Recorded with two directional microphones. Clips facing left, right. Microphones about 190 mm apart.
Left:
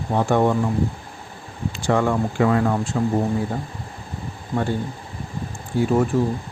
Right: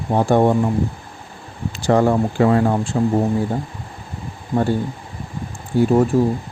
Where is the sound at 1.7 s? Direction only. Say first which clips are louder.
Right 4 dB; 35° right (ahead or behind).